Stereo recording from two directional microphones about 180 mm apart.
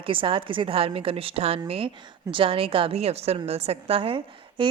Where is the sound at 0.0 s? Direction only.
30° right (ahead or behind).